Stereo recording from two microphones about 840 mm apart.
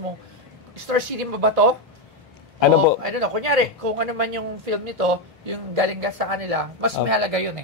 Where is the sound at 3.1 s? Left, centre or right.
Right.